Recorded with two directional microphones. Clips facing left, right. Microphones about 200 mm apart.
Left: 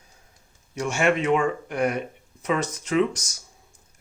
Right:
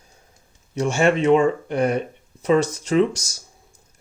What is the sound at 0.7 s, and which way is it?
Speech, 30° right (ahead or behind).